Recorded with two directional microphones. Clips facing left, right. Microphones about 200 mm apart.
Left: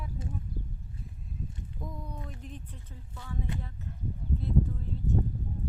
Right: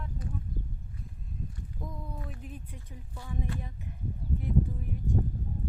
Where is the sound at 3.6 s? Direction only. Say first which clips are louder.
Even; 15° right (ahead or behind).